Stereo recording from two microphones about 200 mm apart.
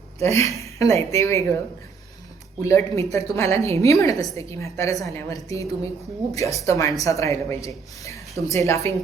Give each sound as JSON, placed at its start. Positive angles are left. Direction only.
{"t": 0.2, "sound": "a woman's voice", "side_deg": 15}
{"t": 2.6, "sound": "a woman's voice", "side_deg": 15}